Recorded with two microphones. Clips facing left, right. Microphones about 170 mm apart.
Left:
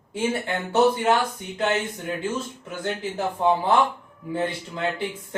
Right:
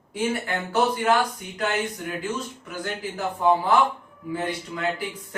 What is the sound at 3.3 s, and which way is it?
Speech, 25° left (ahead or behind).